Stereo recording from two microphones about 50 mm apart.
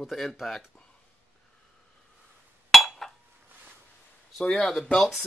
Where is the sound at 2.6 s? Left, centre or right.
Centre.